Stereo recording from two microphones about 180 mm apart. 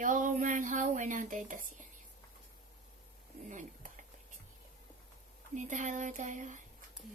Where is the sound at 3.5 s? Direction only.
45° right (ahead or behind).